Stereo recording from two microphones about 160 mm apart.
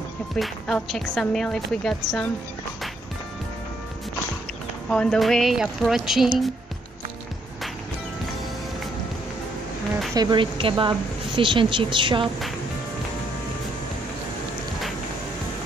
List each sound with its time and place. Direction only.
0.4 s a woman's voice: 5° left (ahead or behind)
4.8 s a woman's voice: 5° left (ahead or behind)
10.1 s a woman's voice: 25° right (ahead or behind)